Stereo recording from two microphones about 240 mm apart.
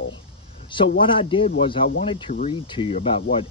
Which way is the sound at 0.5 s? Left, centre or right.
Left.